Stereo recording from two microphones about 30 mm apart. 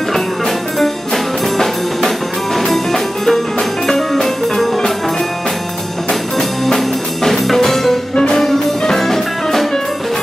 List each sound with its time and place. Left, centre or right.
0.1 s music: centre
6.3 s music: centre
6.8 s music: centre